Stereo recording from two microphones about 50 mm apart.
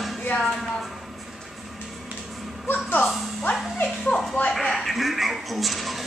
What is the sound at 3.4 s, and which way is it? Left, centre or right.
Music, left.